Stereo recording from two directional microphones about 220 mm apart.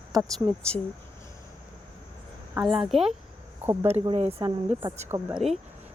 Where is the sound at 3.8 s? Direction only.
25° right (ahead or behind).